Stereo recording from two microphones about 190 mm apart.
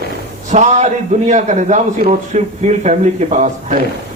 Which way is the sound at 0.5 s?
40° right (ahead or behind).